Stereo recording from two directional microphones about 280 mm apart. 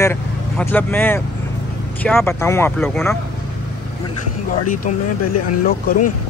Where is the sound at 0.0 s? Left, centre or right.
Centre.